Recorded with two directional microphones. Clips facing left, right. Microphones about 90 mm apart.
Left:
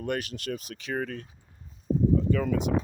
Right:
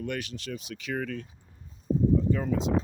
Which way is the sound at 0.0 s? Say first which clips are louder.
Left 3 dB; 45° left (ahead or behind).